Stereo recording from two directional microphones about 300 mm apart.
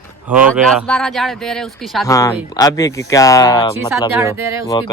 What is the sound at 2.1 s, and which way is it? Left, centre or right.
Speech, centre.